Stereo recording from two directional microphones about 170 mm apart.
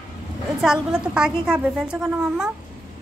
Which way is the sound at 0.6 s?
5° right (ahead or behind).